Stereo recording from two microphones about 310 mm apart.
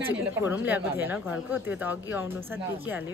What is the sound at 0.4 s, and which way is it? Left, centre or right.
A woman's voice, centre.